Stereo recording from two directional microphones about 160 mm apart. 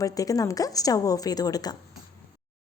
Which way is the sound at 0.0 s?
20° left (ahead or behind).